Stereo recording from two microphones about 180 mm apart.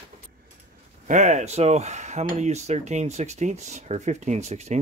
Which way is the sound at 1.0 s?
40° right (ahead or behind).